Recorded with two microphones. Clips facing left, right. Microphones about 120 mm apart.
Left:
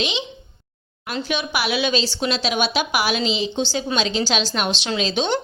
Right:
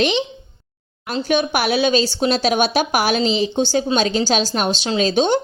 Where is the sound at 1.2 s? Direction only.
45° right (ahead or behind).